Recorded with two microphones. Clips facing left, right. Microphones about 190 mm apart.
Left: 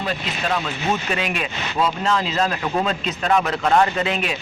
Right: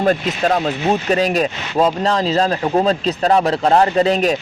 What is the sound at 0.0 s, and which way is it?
Speech, 45° right (ahead or behind).